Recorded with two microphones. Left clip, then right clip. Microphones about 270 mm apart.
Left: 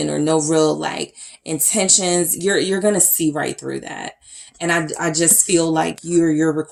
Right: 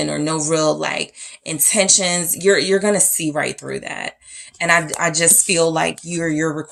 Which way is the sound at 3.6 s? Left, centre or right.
Right.